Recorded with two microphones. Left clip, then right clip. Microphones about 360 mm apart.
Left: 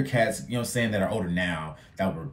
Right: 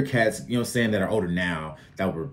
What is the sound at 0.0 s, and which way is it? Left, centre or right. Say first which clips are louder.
Speech: right 2 dB; centre.